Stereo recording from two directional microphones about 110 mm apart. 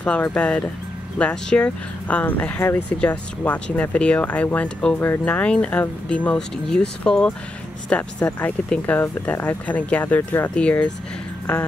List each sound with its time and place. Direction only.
0.0 s speech: 10° left (ahead or behind)